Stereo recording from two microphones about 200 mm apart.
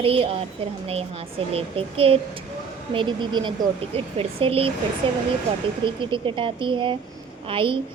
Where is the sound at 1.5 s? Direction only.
30° right (ahead or behind).